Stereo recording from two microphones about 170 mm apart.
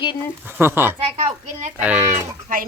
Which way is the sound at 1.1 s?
45° right (ahead or behind).